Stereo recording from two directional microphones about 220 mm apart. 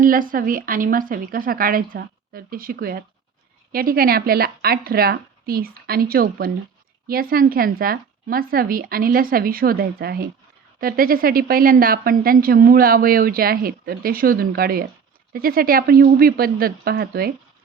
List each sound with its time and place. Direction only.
0.0 s a woman's voice: 40° right (ahead or behind)